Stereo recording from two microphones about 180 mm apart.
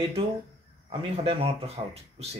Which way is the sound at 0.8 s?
35° right (ahead or behind).